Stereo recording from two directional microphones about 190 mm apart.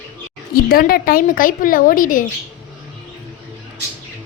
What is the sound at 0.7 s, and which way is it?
A woman's voice, 50° left (ahead or behind).